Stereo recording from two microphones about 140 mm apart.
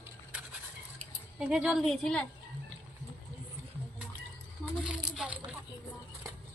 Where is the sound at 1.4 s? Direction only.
10° right (ahead or behind).